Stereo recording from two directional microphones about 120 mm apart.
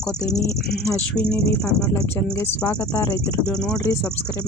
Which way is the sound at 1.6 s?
25° left (ahead or behind).